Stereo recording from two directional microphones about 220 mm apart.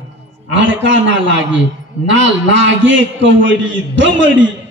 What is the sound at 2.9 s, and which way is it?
A man's voice, 55° right (ahead or behind).